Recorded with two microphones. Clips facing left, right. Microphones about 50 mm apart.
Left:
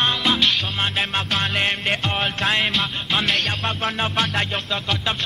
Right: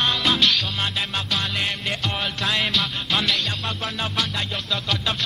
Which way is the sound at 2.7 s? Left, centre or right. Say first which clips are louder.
Left 1 dB; left.